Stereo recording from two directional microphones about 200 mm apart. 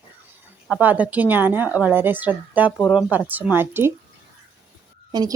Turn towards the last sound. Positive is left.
turn(degrees=-20)  # may be behind; listen again after turning